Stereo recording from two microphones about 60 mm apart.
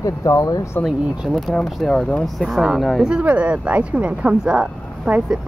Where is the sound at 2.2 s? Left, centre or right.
Centre.